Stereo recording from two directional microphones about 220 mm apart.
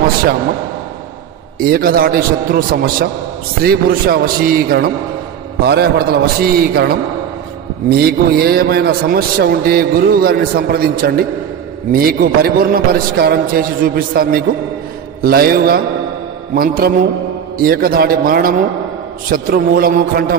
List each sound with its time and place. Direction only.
1.6 s a man's voice: 40° right (ahead or behind)